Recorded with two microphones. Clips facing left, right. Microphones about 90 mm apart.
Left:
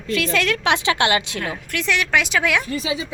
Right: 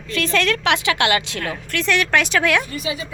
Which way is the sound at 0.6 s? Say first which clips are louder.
Even; 20° left (ahead or behind).